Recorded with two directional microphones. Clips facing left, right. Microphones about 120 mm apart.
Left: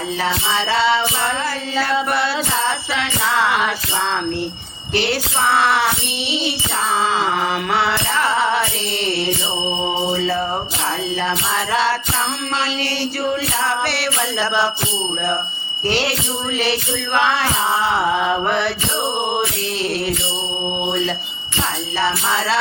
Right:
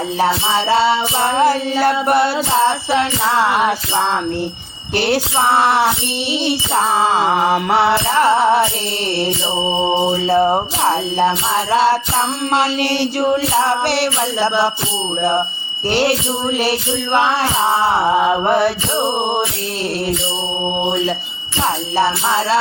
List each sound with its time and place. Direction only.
0.2 s music: 40° right (ahead or behind)
4.9 s music: 40° right (ahead or behind)
10.2 s music: 45° right (ahead or behind)
11.7 s music: 40° right (ahead or behind)
12.5 s music: 50° right (ahead or behind)
17.1 s music: 35° right (ahead or behind)
22.3 s music: 30° right (ahead or behind)